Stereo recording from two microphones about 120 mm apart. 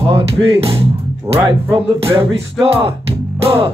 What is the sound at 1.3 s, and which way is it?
Music, 25° right (ahead or behind).